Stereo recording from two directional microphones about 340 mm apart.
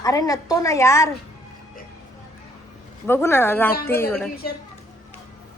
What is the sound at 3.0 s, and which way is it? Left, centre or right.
Speech, centre.